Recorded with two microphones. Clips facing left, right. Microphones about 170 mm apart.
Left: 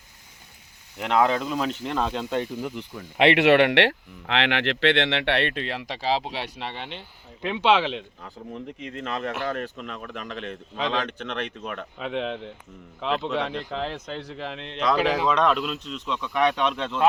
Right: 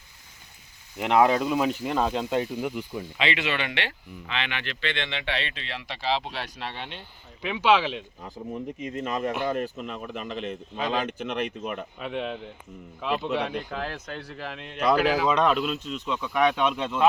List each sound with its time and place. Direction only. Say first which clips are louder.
0.9 s a man's voice: right 1 dB; 5° right (ahead or behind)
3.2 s speech: left 12 dB; 65° left (ahead or behind); by 6.3 s 40° left (ahead or behind)
7.7 s a man's voice: even; 5° right (ahead or behind)
16.7 s speech: even; 10° right (ahead or behind)